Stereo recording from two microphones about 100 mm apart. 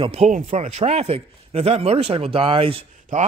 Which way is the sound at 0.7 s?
90° right.